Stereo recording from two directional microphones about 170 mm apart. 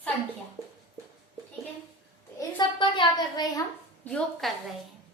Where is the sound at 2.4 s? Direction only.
25° left (ahead or behind).